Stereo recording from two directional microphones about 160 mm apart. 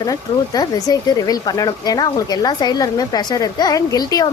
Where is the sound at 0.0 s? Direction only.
25° left (ahead or behind).